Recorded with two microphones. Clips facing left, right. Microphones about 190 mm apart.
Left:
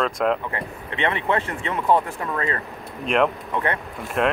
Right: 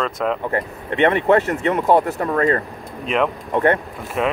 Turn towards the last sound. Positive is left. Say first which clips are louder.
# right 1 dB
turn(degrees=0)  # may be behind; listen again after turning